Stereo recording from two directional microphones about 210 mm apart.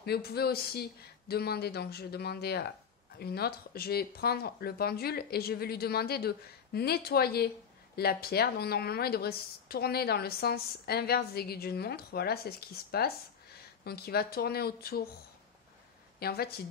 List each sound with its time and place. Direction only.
0.0 s speech: 50° left (ahead or behind)
16.2 s a woman's voice: 50° left (ahead or behind)